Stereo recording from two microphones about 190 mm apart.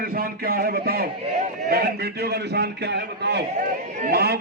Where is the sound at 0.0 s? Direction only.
50° right (ahead or behind).